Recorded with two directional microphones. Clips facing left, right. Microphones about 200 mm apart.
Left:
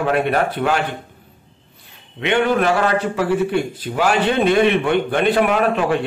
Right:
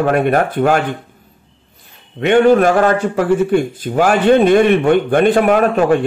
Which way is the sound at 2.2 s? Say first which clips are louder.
Right 7 dB; 45° right (ahead or behind).